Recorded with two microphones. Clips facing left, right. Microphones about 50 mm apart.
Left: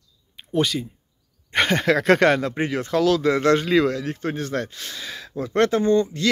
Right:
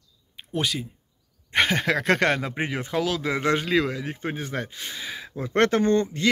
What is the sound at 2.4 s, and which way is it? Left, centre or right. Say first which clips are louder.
A man's voice: left 4 dB; centre.